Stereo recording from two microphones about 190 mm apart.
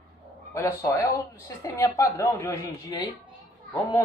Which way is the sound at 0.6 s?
15° left (ahead or behind).